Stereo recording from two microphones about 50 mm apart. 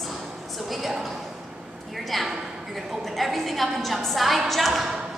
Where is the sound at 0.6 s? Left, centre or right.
Centre.